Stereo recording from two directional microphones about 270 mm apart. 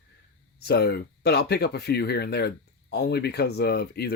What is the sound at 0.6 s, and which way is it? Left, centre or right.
Speech, left.